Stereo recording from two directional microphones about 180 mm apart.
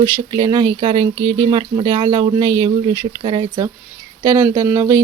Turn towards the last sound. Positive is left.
turn(degrees=-15)  # may be behind; listen again after turning